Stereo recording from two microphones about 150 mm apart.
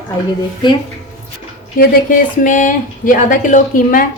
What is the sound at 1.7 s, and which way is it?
Speech, 65° left (ahead or behind).